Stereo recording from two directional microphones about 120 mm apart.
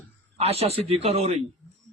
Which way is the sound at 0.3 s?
60° right (ahead or behind).